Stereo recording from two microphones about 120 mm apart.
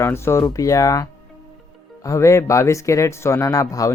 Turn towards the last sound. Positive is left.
turn(degrees=30)  # may be behind; listen again after turning